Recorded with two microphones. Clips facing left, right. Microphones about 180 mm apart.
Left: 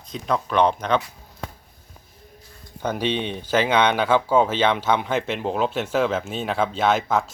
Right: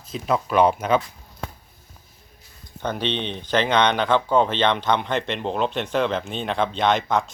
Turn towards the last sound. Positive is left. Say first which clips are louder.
# even
turn(degrees=5)  # may be behind; listen again after turning